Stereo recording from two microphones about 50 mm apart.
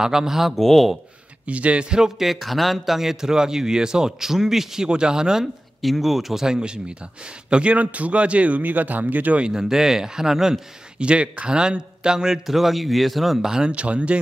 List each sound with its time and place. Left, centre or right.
0.0 s speech: centre
1.5 s speech: right
5.8 s a man's voice: centre; by 9.4 s right
9.4 s speech: centre
11.0 s speech: right
13.7 s a man's voice: right